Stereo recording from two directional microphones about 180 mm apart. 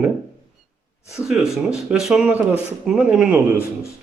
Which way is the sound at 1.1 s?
5° right (ahead or behind).